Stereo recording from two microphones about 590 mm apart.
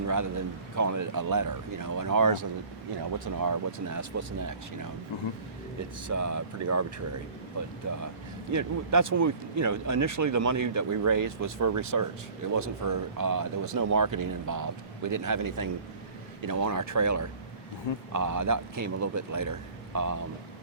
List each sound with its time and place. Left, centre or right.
0.1 s speech: right
3.4 s speech: right
6.1 s speech: right
7.9 s speech: right